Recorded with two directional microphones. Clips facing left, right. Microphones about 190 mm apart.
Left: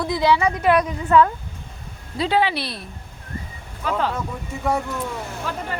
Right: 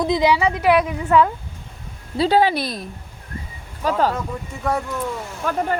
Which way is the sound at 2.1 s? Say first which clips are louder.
Right 4 dB; 35° right (ahead or behind).